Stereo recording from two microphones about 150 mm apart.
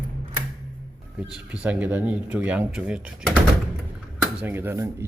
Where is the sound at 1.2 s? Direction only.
5° right (ahead or behind).